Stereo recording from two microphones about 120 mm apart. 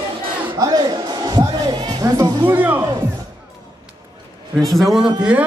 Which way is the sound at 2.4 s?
15° right (ahead or behind).